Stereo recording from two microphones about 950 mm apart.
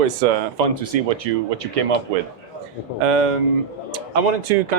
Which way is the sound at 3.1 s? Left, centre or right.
Right.